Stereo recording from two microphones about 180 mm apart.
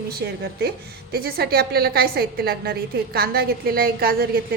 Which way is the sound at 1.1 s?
60° right (ahead or behind).